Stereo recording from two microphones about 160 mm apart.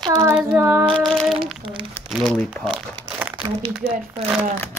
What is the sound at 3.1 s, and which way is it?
Crumpling, 10° right (ahead or behind).